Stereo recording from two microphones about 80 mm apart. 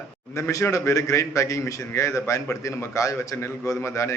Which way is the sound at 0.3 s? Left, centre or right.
Left.